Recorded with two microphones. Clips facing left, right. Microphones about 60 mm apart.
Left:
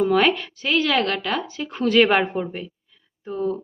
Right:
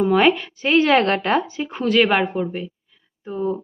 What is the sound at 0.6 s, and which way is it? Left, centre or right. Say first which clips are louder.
Speech: right 5 dB; right.